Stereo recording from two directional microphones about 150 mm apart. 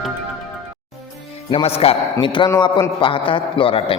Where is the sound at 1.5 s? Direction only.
40° left (ahead or behind).